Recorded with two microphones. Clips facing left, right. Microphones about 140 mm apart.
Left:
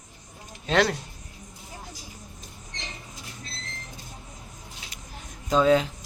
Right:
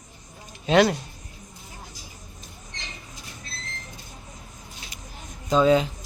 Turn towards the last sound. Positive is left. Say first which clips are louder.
# right 1 dB
turn(degrees=0)  # may be behind; listen again after turning